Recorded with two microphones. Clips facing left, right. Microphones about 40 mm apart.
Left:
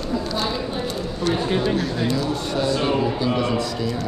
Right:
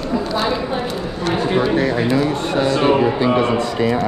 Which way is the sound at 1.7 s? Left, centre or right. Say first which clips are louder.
Right 7 dB; right.